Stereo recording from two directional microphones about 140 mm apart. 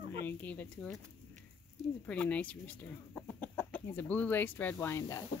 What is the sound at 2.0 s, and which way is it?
Speech, 10° left (ahead or behind).